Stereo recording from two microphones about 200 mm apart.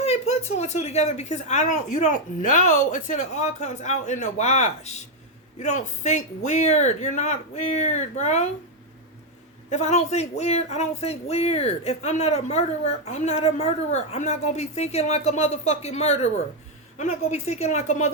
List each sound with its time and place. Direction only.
0.0 s a sound: 30° left (ahead or behind)
0.5 s a man's voice: 35° left (ahead or behind)
9.6 s a man's voice: 35° left (ahead or behind)